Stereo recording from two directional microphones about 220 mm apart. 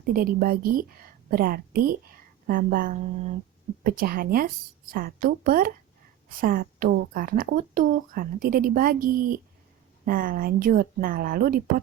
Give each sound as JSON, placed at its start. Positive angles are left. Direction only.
{"t": 0.0, "sound": "a woman's voice", "side_deg": -40}